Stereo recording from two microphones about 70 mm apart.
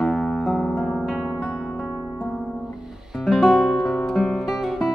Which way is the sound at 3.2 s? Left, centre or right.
Centre.